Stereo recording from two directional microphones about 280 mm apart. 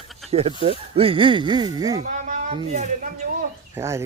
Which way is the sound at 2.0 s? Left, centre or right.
Right.